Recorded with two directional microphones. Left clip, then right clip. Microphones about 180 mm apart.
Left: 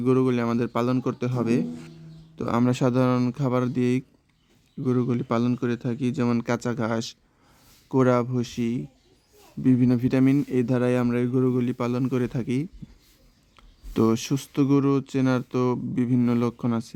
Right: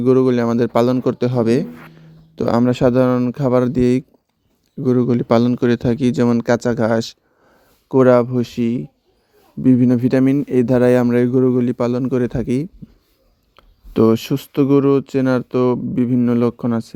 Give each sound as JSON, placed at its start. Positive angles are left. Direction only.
{"t": 0.0, "sound": "speech", "side_deg": -25}
{"t": 2.6, "sound": "speech", "side_deg": -15}
{"t": 3.3, "sound": "speech", "side_deg": -25}